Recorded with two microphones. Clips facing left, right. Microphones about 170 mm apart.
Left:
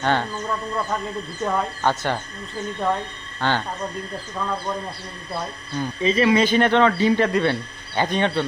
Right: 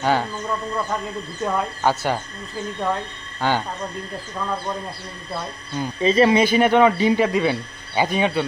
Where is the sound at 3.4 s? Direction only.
10° right (ahead or behind).